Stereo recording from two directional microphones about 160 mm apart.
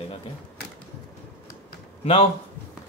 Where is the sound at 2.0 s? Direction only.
35° left (ahead or behind).